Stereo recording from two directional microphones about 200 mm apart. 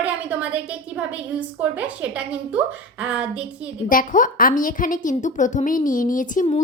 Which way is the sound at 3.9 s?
40° left (ahead or behind).